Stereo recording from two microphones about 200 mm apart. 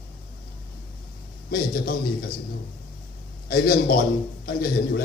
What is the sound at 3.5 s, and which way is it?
A man's voice, 50° left (ahead or behind).